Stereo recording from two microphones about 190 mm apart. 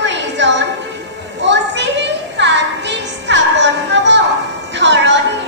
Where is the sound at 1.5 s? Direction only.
70° right (ahead or behind).